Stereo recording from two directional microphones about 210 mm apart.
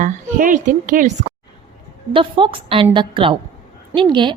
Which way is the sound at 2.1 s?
25° right (ahead or behind).